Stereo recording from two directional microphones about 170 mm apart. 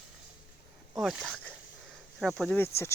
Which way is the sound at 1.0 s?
Centre (ahead or behind).